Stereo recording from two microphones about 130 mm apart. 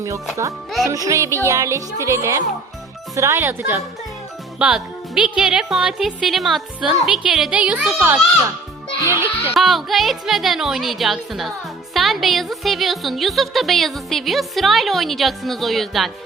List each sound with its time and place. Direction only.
0.9 s speech: 25° right (ahead or behind)
4.6 s a child's voice: 10° right (ahead or behind)
9.6 s speech: centre (ahead or behind)